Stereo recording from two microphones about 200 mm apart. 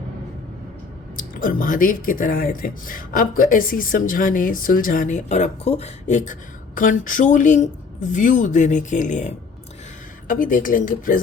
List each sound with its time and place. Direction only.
1.1 s speech: 45° left (ahead or behind)